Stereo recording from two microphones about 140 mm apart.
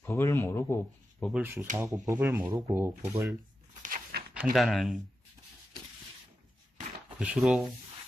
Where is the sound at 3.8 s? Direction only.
85° right.